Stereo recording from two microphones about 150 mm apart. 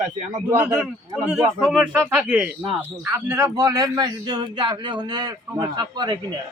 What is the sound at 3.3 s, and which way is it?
A man's voice, 25° right (ahead or behind).